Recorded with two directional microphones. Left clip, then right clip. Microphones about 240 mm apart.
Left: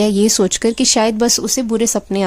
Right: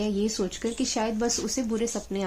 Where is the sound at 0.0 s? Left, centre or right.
Left.